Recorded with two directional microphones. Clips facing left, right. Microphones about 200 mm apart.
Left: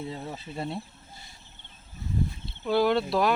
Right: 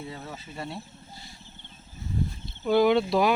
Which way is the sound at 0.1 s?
20° left (ahead or behind).